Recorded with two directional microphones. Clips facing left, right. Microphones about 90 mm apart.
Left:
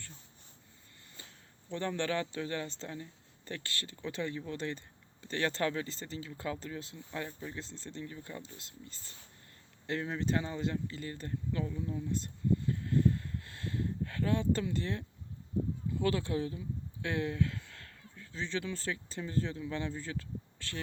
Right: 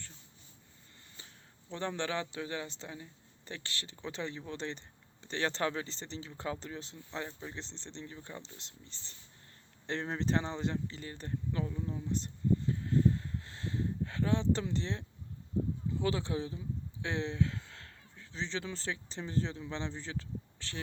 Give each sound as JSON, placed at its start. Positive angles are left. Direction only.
{"t": 1.7, "sound": "speech", "side_deg": -20}